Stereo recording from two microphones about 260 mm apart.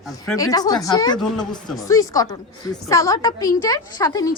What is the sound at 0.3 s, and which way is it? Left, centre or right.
A woman's voice, centre.